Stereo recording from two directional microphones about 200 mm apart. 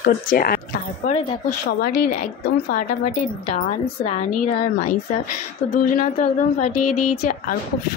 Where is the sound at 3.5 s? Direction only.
35° left (ahead or behind).